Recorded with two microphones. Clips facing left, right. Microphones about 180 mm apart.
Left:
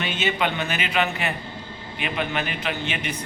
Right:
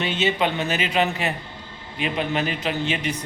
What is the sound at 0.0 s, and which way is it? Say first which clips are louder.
Speech: right 2 dB; 30° right (ahead or behind).